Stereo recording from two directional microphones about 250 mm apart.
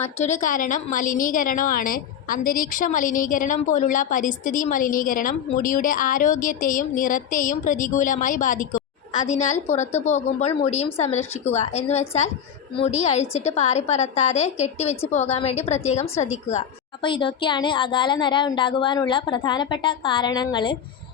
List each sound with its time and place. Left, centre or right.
0.0 s a woman's voice: left
16.0 s a woman's voice: centre
16.5 s a woman's voice: left